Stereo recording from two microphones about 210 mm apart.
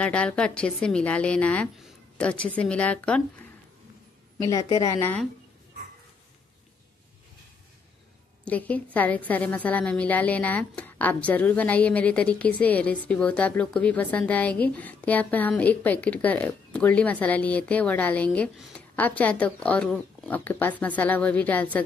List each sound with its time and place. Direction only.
0.0 s a woman's voice: 5° left (ahead or behind)
8.5 s a woman's voice: 5° left (ahead or behind)